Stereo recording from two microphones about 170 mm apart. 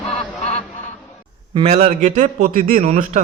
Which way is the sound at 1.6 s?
40° right (ahead or behind).